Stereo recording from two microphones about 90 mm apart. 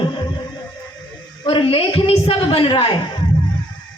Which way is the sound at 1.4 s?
85° left.